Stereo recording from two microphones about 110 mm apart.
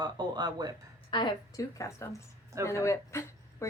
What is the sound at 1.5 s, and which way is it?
Speech, 30° left (ahead or behind).